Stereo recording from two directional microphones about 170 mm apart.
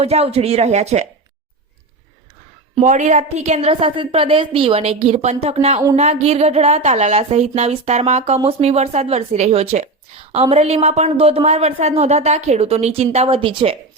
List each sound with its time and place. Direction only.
0.0 s speech: 35° right (ahead or behind)
2.7 s speech: 45° right (ahead or behind); by 13.7 s 30° right (ahead or behind)